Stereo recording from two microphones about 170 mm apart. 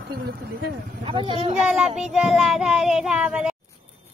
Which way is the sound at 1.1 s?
30° right (ahead or behind).